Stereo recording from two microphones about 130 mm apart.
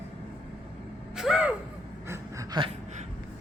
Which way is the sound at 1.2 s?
5° right (ahead or behind).